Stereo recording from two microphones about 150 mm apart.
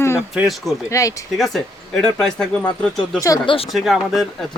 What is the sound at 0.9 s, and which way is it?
Speech, 20° left (ahead or behind).